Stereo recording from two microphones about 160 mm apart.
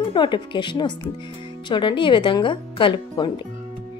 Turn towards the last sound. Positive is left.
turn(degrees=30)  # may be behind; listen again after turning